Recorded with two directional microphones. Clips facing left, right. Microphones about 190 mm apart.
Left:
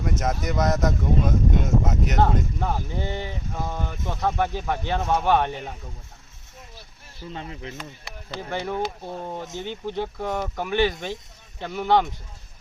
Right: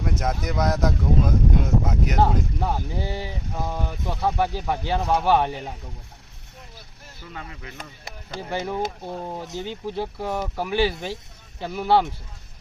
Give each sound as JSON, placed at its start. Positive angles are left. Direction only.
{"t": 0.0, "sound": "speech", "side_deg": 0}
{"t": 7.3, "sound": "speech", "side_deg": 25}
{"t": 8.4, "sound": "speech", "side_deg": -10}